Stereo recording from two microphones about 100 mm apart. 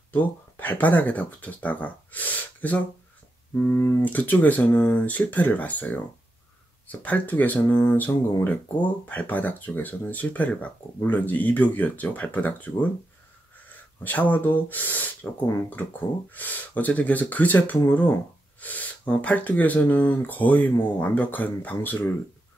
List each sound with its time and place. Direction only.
0.1 s speech: 15° left (ahead or behind)